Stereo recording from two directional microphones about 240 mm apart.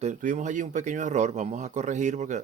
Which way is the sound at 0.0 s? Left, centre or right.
Right.